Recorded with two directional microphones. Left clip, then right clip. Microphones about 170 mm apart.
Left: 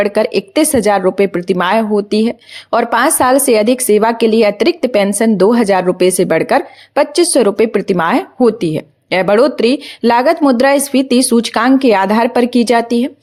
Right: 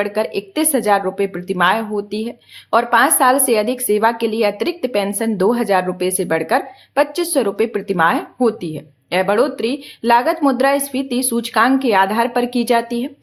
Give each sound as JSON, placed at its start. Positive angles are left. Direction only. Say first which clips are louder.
{"t": 0.0, "sound": "a woman's voice", "louder": "left 6 dB", "side_deg": 40}